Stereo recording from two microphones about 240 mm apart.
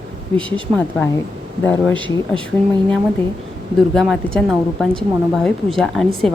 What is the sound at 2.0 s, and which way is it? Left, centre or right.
Speech, centre.